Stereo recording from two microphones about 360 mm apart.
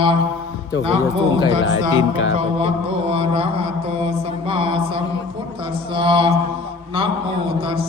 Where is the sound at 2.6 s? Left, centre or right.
Centre.